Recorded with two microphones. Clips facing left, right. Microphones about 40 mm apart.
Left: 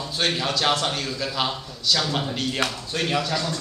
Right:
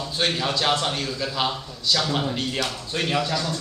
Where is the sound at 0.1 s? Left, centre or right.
Centre.